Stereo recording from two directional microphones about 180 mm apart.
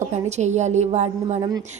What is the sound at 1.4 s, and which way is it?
Speech, 20° right (ahead or behind).